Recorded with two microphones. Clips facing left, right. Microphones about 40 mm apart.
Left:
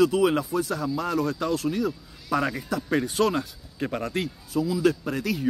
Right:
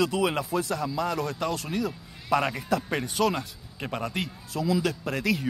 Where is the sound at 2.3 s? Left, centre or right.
Centre.